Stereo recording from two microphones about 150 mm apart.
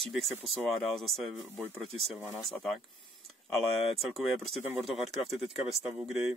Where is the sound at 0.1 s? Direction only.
Centre (ahead or behind).